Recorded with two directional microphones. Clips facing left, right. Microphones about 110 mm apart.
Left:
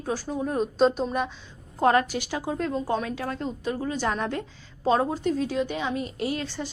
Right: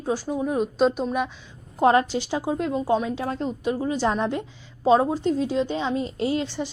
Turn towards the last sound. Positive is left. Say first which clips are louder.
# right 4 dB
turn(degrees=-20)  # may be behind; listen again after turning